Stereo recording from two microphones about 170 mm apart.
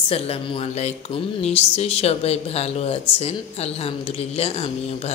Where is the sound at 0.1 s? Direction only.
35° left (ahead or behind).